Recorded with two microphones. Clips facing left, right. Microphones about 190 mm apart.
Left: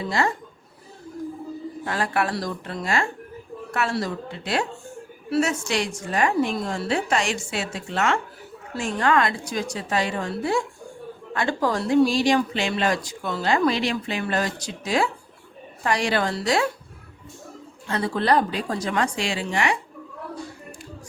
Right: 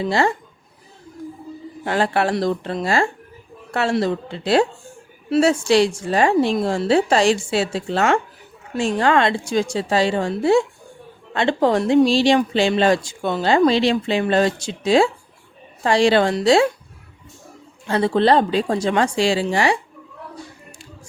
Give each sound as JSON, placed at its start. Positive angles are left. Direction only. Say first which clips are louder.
{"t": 0.0, "sound": "speech", "louder": "right 5 dB", "side_deg": -30}
{"t": 1.8, "sound": "a woman's voice", "louder": "right 6 dB", "side_deg": -30}
{"t": 17.8, "sound": "speech", "louder": "right 6 dB", "side_deg": -30}